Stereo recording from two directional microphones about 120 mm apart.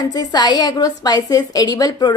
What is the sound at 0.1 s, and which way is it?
A woman's voice, 35° left (ahead or behind).